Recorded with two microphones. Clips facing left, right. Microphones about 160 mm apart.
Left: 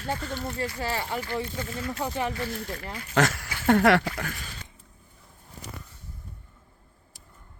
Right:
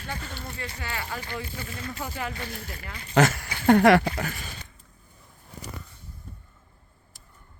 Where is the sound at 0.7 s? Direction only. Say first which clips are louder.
Left 5 dB; 35° left (ahead or behind).